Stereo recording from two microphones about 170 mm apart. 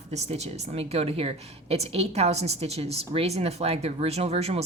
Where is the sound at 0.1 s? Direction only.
40° right (ahead or behind).